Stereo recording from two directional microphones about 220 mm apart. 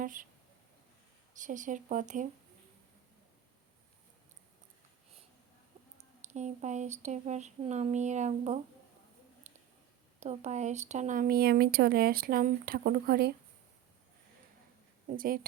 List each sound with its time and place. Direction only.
0.0 s speech: 35° right (ahead or behind)
1.3 s speech: 35° right (ahead or behind)
6.0 s speech: 30° right (ahead or behind)
9.5 s a sound: 30° right (ahead or behind)
10.2 s speech: 30° right (ahead or behind)
15.0 s speech: 40° right (ahead or behind)